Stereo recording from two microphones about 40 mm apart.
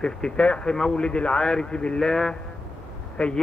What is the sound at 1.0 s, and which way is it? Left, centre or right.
Speech, left.